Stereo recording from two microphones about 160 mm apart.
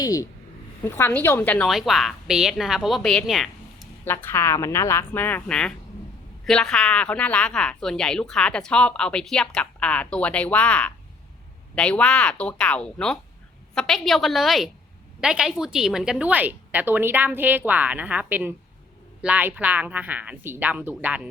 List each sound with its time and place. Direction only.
0.0 s a woman's voice: 20° left (ahead or behind); by 3.5 s centre (ahead or behind)
4.0 s a woman's voice: 15° left (ahead or behind); by 21.2 s 10° right (ahead or behind)